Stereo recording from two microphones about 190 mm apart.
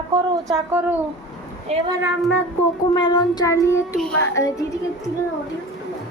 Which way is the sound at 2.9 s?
20° left (ahead or behind).